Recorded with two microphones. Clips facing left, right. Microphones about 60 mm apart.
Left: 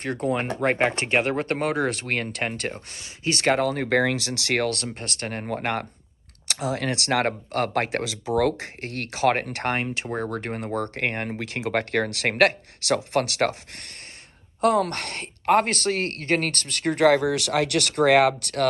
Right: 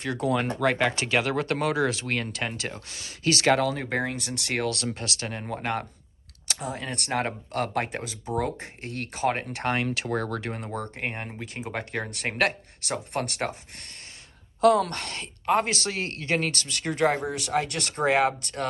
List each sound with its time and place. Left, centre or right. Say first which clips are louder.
0.0 s speech: left 1 dB; left
2.9 s speech: right 5 dB; left
4.9 s speech: left 2 dB; left
6.4 s a woman's voice: left 6 dB; left
8.4 s a woman's voice: left 7 dB; left
10.1 s speech: left 1 dB; left
10.8 s a woman's voice: left 6 dB; left
11.3 s a woman's voice: left 7 dB; left
14.6 s a woman's voice: right 1 dB; left